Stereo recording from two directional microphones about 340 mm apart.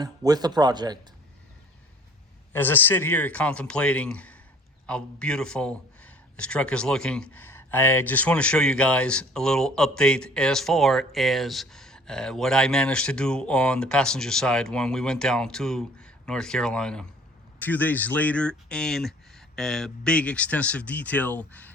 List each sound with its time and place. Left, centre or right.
0.0 s speech: centre
2.5 s speech: centre